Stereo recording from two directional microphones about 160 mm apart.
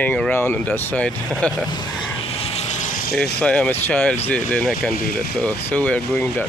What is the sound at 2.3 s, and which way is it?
Vehicle, 40° left (ahead or behind).